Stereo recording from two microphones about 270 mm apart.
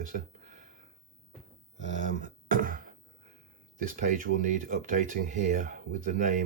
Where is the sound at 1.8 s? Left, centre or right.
Right.